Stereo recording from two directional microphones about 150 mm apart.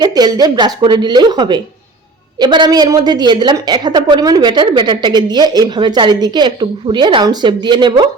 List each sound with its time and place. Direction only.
0.0 s a woman's voice: 25° right (ahead or behind)